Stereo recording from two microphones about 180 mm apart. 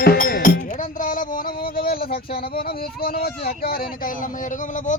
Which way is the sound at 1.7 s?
55° left (ahead or behind).